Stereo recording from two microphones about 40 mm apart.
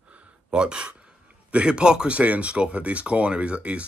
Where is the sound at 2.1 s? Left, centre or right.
Right.